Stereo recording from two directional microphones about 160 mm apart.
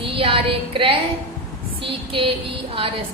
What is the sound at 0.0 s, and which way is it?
Speech, 35° right (ahead or behind).